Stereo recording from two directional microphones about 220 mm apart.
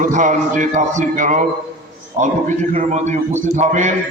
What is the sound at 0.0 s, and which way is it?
A man's voice, 35° right (ahead or behind).